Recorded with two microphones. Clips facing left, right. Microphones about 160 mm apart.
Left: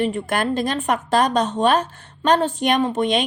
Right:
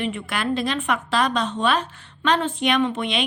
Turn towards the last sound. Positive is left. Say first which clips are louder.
# left 3 dB
turn(degrees=40)  # may be behind; listen again after turning